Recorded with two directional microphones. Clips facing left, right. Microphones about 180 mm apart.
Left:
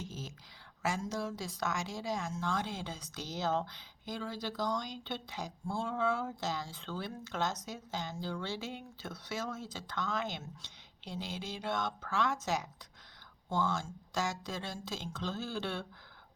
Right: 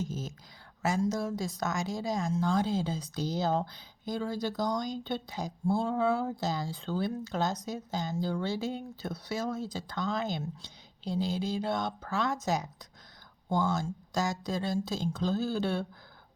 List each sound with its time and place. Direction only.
0.0 s a woman's voice: 40° right (ahead or behind)